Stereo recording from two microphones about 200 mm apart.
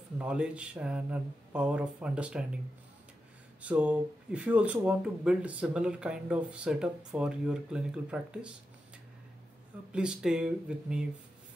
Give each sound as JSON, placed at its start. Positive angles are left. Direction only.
{"t": 0.2, "sound": "speech", "side_deg": -5}
{"t": 3.6, "sound": "speech", "side_deg": -5}
{"t": 9.9, "sound": "speech", "side_deg": -5}